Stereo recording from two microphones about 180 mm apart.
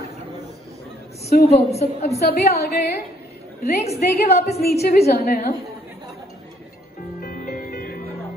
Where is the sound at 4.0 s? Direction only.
60° left (ahead or behind).